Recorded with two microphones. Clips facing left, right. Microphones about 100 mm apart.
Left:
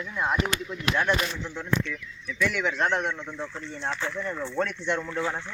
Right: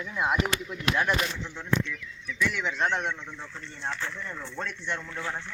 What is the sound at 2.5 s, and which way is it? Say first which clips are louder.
Speech: left 2 dB; 5° left (ahead or behind).